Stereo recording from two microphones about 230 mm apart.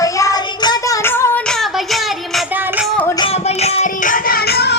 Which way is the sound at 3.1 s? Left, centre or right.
Left.